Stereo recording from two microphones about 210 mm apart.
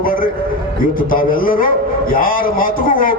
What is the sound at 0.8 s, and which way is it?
A man's voice, 40° left (ahead or behind).